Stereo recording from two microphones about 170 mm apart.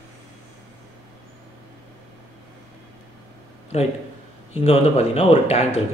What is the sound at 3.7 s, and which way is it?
Speech, 35° left (ahead or behind).